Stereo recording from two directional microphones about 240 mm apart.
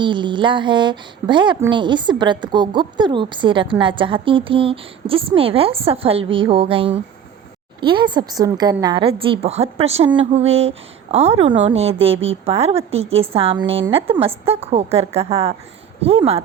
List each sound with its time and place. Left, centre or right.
0.0 s a woman's voice: centre
12.1 s a woman's voice: right
12.5 s a woman's voice: right